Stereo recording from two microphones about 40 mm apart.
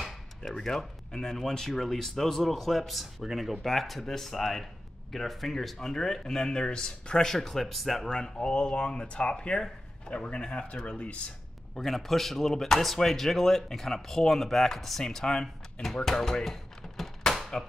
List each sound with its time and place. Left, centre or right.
0.5 s speech: centre
7.3 s speech: centre
8.4 s speech: left
11.7 s speech: centre